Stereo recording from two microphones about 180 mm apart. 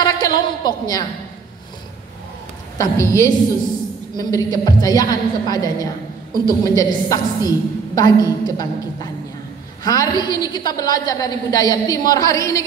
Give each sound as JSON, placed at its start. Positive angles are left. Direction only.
{"t": 0.0, "sound": "a woman's voice", "side_deg": 20}
{"t": 2.8, "sound": "a woman's voice", "side_deg": 15}